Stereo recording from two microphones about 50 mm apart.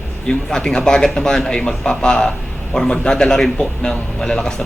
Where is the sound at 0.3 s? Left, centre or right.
Centre.